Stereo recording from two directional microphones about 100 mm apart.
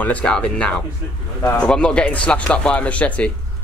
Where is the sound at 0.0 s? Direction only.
10° left (ahead or behind).